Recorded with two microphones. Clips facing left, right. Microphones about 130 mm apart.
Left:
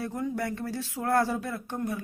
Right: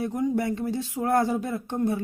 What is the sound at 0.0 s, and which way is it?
Speech, 20° right (ahead or behind).